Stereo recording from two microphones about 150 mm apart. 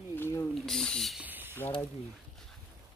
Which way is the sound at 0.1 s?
15° left (ahead or behind).